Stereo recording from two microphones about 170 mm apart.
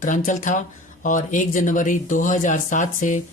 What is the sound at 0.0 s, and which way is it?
Speech, 50° left (ahead or behind).